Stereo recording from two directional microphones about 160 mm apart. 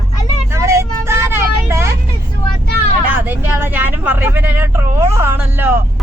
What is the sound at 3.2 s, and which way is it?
Vehicle, 10° right (ahead or behind).